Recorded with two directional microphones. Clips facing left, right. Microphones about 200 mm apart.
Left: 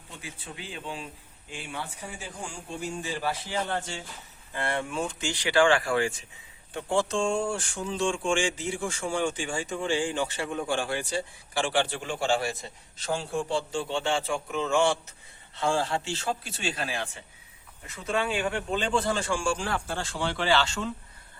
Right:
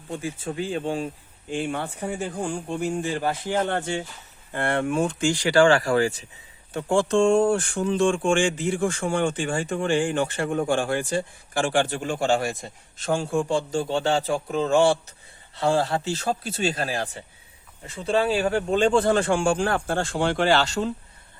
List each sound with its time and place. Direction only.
0.1 s speech: 45° right (ahead or behind)